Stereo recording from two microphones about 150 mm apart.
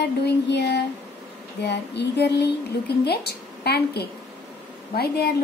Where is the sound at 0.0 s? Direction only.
90° left.